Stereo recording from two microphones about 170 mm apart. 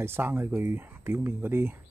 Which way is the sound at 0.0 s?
15° right (ahead or behind).